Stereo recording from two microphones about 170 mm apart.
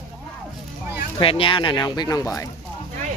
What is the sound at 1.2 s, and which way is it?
Speech, 30° left (ahead or behind).